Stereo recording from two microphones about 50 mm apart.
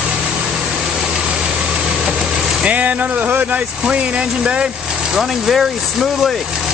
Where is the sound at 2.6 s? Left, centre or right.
Right.